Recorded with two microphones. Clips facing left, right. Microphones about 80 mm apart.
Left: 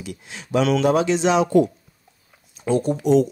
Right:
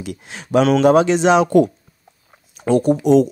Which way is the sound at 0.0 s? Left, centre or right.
Right.